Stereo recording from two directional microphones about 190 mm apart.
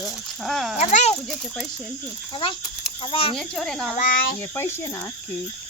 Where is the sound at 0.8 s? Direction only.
40° left (ahead or behind).